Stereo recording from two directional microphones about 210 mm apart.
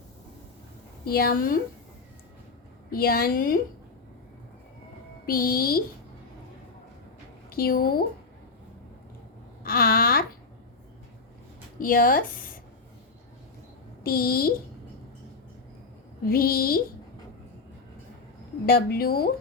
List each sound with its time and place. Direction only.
1.0 s speech: 45° left (ahead or behind)
2.9 s speech: 45° left (ahead or behind)
5.2 s speech: 45° left (ahead or behind)
7.5 s speech: 45° left (ahead or behind)
9.6 s speech: 45° left (ahead or behind)
11.8 s speech: 40° left (ahead or behind)
14.0 s speech: 45° left (ahead or behind)
16.3 s speech: 45° left (ahead or behind)
18.6 s speech: 45° left (ahead or behind)